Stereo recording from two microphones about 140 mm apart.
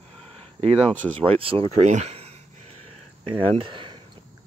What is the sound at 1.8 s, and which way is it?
Speech, 55° right (ahead or behind).